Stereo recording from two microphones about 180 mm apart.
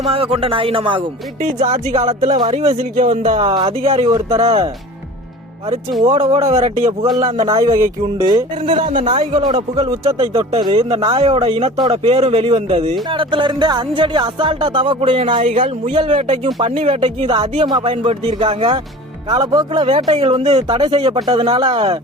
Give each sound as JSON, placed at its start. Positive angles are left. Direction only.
{"t": 0.1, "sound": "speech", "side_deg": -30}
{"t": 1.4, "sound": "speech", "side_deg": -40}
{"t": 3.4, "sound": "speech", "side_deg": -25}
{"t": 6.5, "sound": "speech", "side_deg": -40}
{"t": 7.3, "sound": "music", "side_deg": -20}
{"t": 8.6, "sound": "speech", "side_deg": -40}
{"t": 9.9, "sound": "music", "side_deg": -20}
{"t": 10.2, "sound": "speech", "side_deg": -30}
{"t": 13.1, "sound": "music", "side_deg": -30}
{"t": 17.9, "sound": "speech", "side_deg": -30}
{"t": 19.3, "sound": "music", "side_deg": -25}